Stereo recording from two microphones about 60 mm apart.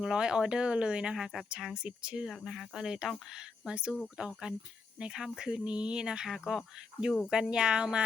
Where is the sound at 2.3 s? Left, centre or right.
Centre.